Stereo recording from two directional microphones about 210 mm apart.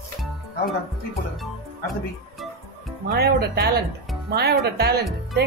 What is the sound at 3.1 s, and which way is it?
Speech, 50° right (ahead or behind).